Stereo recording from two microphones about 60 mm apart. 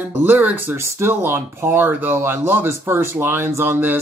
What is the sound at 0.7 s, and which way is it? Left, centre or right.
Speech, right.